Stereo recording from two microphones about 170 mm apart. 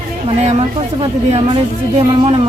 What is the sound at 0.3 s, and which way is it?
A woman's voice, 40° right (ahead or behind).